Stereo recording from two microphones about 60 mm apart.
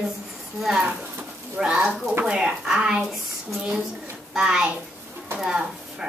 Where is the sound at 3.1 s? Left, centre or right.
Centre.